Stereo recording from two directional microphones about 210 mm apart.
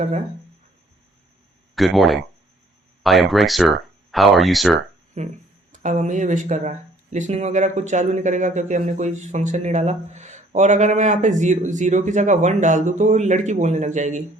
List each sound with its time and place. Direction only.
1.7 s speech: centre (ahead or behind)
5.2 s speech: 30° right (ahead or behind)